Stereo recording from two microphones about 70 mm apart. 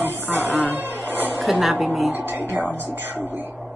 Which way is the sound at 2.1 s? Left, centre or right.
Right.